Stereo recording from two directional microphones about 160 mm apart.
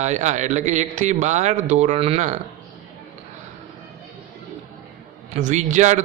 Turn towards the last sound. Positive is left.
turn(degrees=-50)  # may be behind; listen again after turning